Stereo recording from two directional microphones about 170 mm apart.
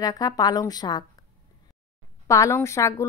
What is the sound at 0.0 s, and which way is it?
Speech, 20° left (ahead or behind).